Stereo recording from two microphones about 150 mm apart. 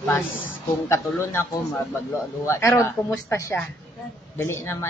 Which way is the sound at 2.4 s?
15° left (ahead or behind).